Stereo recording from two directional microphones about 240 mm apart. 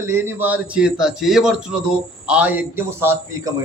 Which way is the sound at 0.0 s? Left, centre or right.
Centre.